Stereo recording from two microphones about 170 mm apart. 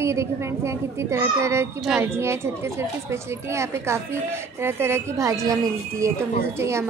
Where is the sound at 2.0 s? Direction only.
15° right (ahead or behind).